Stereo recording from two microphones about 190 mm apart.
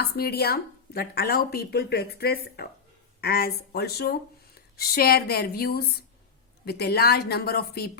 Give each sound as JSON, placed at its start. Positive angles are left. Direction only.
{"t": 0.0, "sound": "speech", "side_deg": 55}